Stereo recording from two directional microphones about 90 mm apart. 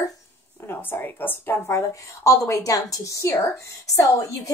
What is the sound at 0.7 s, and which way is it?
A woman's voice, 20° left (ahead or behind).